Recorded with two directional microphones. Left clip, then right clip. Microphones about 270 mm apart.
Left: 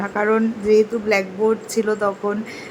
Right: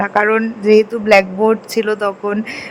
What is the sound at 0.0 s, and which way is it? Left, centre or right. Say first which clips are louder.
Speech: right 5 dB; right.